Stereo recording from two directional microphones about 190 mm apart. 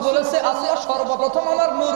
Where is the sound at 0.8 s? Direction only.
35° right (ahead or behind).